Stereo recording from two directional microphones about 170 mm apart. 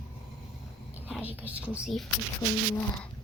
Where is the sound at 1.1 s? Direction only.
10° right (ahead or behind).